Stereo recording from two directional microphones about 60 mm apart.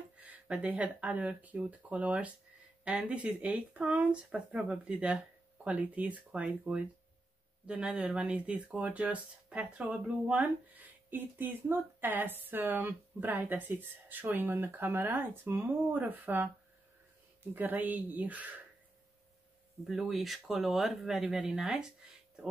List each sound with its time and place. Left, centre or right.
0.2 s speech: right
17.6 s speech: right
19.9 s speech: centre